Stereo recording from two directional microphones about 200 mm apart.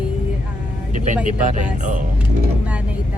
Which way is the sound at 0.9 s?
40° right (ahead or behind).